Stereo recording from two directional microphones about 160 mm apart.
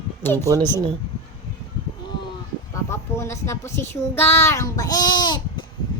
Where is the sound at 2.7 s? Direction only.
15° left (ahead or behind).